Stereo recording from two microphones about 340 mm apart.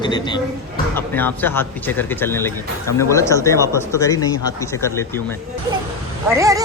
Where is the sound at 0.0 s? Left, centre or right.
Centre.